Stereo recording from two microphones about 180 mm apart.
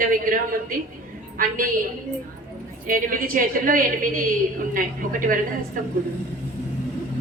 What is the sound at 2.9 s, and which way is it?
A woman's voice, 50° right (ahead or behind).